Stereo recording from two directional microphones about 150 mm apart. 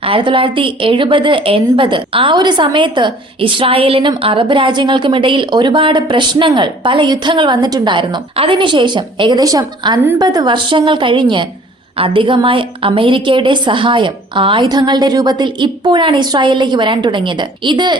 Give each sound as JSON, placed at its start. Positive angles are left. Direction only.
{"t": 0.0, "sound": "a woman's voice", "side_deg": -35}